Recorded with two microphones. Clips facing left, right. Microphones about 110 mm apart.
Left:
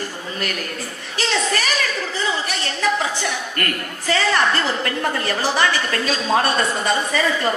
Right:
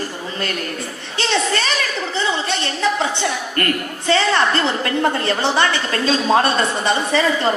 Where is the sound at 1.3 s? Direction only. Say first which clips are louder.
Right 3 dB; 25° right (ahead or behind).